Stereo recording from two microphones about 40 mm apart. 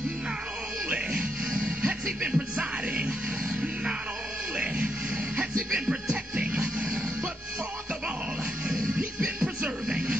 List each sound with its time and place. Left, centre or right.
0.8 s music: right
2.2 s music: right
4.6 s music: right
9.8 s music: centre